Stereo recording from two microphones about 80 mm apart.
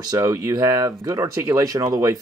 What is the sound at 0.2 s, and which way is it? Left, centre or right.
Speech, right.